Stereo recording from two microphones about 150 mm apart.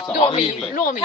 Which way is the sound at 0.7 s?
65° left (ahead or behind).